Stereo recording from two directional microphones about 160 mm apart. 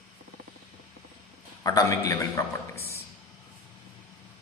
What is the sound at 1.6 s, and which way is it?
Speech, 20° left (ahead or behind).